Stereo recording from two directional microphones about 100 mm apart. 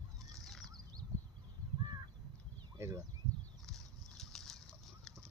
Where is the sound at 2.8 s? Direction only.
25° right (ahead or behind).